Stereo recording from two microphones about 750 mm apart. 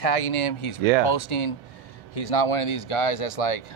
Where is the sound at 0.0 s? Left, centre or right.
Left.